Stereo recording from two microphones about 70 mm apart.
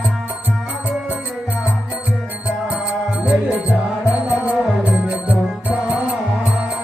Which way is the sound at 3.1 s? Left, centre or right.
Right.